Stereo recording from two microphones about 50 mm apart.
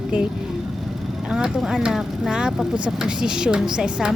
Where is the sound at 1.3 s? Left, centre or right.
Centre.